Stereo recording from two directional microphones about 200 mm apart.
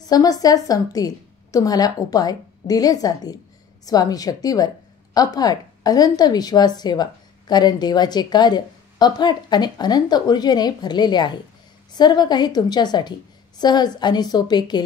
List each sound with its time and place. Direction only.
0.0 s a woman's voice: 20° left (ahead or behind)